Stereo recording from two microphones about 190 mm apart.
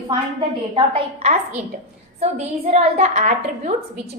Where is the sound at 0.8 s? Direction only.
30° right (ahead or behind).